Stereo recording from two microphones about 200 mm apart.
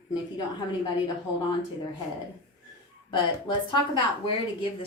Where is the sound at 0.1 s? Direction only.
20° left (ahead or behind).